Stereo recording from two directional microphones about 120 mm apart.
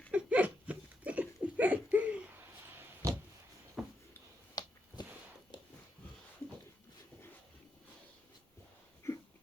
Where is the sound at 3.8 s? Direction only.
5° right (ahead or behind).